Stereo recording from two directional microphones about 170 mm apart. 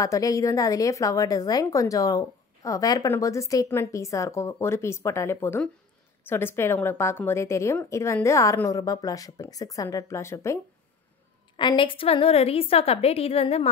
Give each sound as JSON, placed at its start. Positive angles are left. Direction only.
{"t": 0.0, "sound": "a woman's voice", "side_deg": 20}
{"t": 11.5, "sound": "a woman's voice", "side_deg": 30}